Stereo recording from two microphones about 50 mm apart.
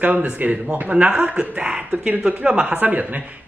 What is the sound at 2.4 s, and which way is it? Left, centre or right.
Speech, centre.